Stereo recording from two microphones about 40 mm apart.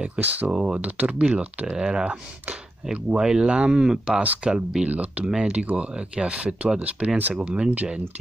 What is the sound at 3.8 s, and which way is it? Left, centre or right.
Speech, centre.